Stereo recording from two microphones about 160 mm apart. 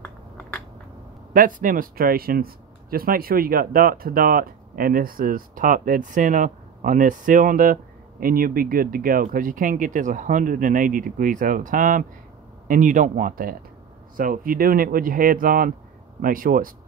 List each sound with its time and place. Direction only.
1.3 s speech: 60° right (ahead or behind)